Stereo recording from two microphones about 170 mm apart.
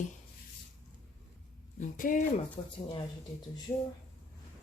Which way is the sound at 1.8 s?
50° left (ahead or behind).